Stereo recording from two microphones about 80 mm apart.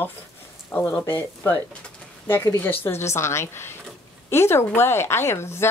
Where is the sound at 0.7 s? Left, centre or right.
Left.